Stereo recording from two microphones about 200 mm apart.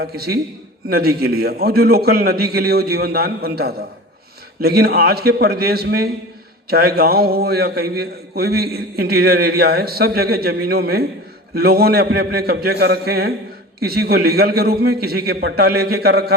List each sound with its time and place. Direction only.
0.0 s a man's voice: 50° right (ahead or behind)